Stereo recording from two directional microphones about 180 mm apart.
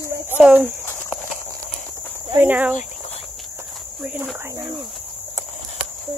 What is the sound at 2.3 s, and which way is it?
Speech, 10° right (ahead or behind).